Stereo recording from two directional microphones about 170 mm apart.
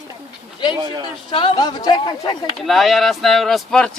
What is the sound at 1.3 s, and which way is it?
Speech, 30° left (ahead or behind).